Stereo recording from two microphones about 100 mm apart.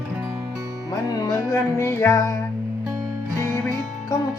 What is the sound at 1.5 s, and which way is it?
Music, 25° left (ahead or behind).